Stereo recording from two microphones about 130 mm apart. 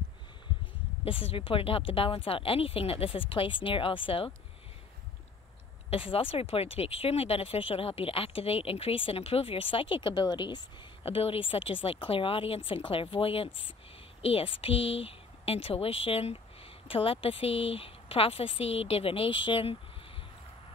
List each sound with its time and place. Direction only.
1.0 s speech: 45° left (ahead or behind)
5.9 s speech: 45° left (ahead or behind)
11.1 s speech: 45° left (ahead or behind)